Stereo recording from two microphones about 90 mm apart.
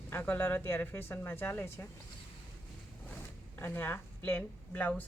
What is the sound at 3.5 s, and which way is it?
A woman's voice, 25° left (ahead or behind).